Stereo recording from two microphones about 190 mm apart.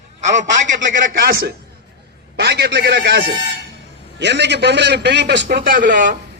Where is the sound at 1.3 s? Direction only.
55° right (ahead or behind).